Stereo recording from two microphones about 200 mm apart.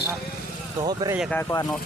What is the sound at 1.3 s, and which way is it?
Speech, 10° left (ahead or behind).